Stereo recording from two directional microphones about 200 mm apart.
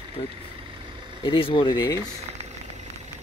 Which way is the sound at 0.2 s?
25° left (ahead or behind).